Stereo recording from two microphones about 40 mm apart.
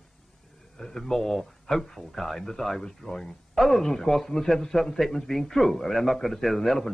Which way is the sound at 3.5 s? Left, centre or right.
Centre.